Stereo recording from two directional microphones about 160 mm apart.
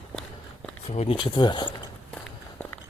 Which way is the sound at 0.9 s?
35° left (ahead or behind).